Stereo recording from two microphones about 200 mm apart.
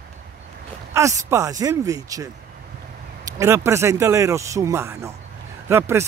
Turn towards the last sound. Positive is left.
turn(degrees=-10)  # may be behind; listen again after turning